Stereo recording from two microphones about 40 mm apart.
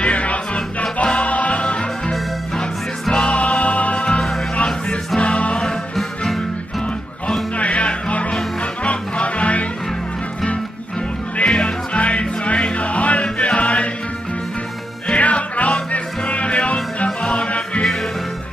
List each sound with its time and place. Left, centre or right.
0.0 s music: left
5.9 s music: centre
7.5 s music: left
11.3 s music: left
15.0 s music: left